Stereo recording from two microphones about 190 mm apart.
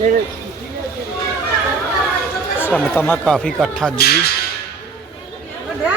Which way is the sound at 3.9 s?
55° left (ahead or behind).